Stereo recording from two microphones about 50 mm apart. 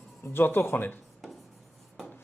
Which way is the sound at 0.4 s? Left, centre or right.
Left.